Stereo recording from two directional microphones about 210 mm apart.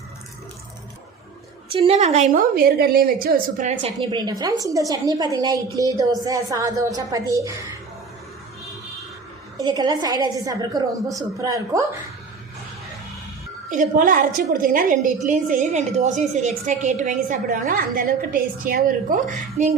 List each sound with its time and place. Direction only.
1.7 s a woman's voice: 25° right (ahead or behind)
9.6 s a woman's voice: 20° right (ahead or behind)
13.7 s a woman's voice: 40° right (ahead or behind)